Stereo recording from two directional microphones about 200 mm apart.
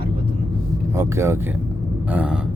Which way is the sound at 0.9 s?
15° right (ahead or behind).